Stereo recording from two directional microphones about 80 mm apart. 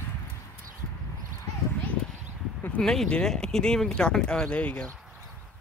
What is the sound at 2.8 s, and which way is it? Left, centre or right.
Speech, centre.